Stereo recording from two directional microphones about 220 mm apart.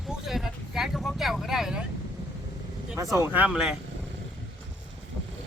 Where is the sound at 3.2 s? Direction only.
5° right (ahead or behind).